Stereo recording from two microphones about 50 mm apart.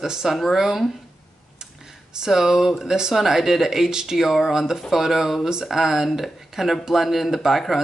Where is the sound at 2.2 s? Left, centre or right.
Centre.